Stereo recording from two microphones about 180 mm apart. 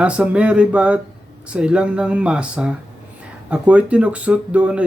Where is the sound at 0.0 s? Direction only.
5° right (ahead or behind).